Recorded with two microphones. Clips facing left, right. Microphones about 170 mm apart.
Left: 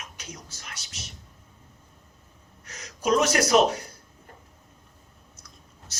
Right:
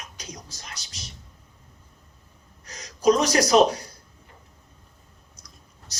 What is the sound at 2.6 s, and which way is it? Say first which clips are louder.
Gasp: right 8 dB; 30° right (ahead or behind).